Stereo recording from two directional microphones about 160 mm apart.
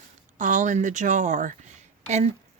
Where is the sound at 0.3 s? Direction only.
50° right (ahead or behind).